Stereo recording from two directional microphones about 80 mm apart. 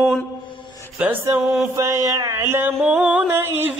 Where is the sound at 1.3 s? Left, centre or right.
Right.